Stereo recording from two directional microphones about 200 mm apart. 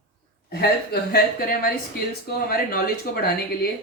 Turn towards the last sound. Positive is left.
turn(degrees=50)  # may be behind; listen again after turning